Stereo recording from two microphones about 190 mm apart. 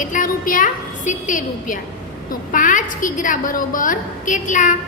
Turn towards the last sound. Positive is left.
turn(degrees=45)  # may be behind; listen again after turning